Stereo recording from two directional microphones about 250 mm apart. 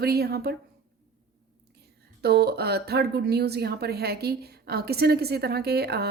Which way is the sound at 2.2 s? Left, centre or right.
Right.